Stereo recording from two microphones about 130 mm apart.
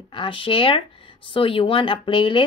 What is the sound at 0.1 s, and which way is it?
Speech, 40° left (ahead or behind).